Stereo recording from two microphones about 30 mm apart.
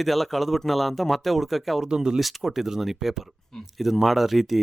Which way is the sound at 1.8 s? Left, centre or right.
Right.